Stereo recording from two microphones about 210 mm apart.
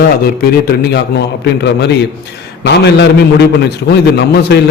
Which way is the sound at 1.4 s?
55° left (ahead or behind).